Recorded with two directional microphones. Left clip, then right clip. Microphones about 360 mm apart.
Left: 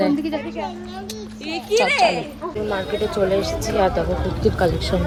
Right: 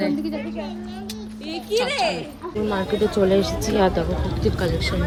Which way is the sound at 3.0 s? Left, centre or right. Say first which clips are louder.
Right 4 dB; right.